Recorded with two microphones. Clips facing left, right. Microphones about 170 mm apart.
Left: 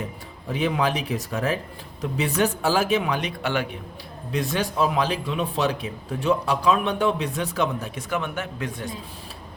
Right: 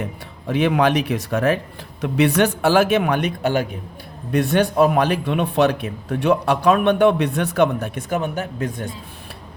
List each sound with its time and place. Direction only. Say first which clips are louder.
0.4 s a man's voice: right 6 dB; 70° right (ahead or behind); by 3.8 s 40° right (ahead or behind)
4.3 s a man's voice: right 8 dB; 60° right (ahead or behind)
8.1 s a man's voice: right 4 dB; 40° right (ahead or behind)